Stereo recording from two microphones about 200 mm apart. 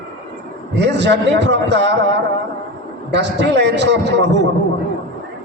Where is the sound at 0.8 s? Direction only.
60° right (ahead or behind).